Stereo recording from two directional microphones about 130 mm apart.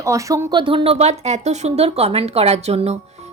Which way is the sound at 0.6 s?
40° right (ahead or behind).